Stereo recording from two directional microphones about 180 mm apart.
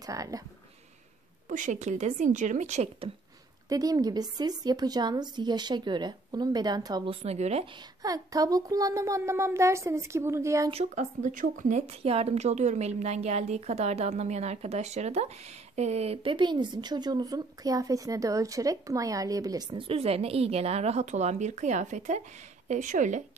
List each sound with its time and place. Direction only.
0.0 s a woman's voice: 20° right (ahead or behind)
1.5 s a woman's voice: 45° right (ahead or behind)
3.6 s a woman's voice: 20° right (ahead or behind); by 7.6 s 35° right (ahead or behind)
8.0 s speech: 20° right (ahead or behind)
10.7 s a woman's voice: 40° right (ahead or behind)